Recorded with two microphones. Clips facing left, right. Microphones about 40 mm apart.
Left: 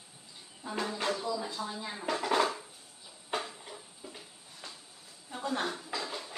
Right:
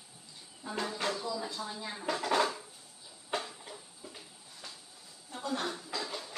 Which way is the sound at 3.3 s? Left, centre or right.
Centre.